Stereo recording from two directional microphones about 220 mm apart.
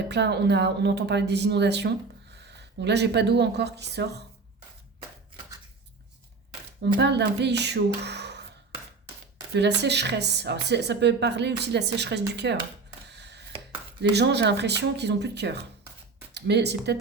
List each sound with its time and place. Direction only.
0.1 s speech: 50° right (ahead or behind)
6.8 s speech: 50° right (ahead or behind)
9.6 s speech: 50° right (ahead or behind)
13.1 s a sound: 50° right (ahead or behind)
14.0 s speech: 50° right (ahead or behind)